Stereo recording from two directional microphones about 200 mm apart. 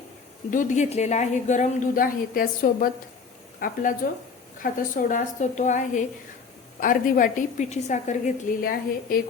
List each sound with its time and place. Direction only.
0.5 s a woman's voice: 40° left (ahead or behind)